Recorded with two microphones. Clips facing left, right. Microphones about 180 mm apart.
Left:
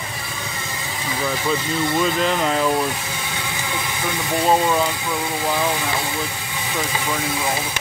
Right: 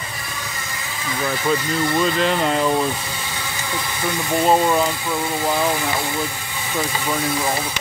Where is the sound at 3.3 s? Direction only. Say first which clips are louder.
Even; 15° left (ahead or behind).